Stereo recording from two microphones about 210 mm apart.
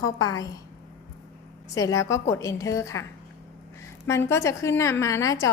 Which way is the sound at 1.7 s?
15° left (ahead or behind).